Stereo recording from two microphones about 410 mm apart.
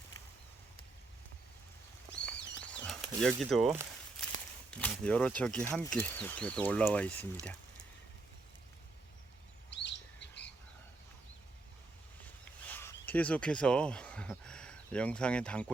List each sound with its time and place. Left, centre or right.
2.6 s a sound: centre
4.7 s speech: centre
9.6 s chirp: left
12.6 s speech: centre